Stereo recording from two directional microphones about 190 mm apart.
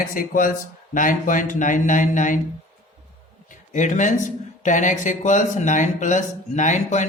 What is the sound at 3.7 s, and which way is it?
Speech, 40° left (ahead or behind).